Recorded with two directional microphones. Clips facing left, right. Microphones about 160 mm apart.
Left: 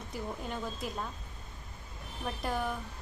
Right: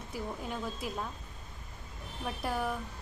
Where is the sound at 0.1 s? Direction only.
5° right (ahead or behind).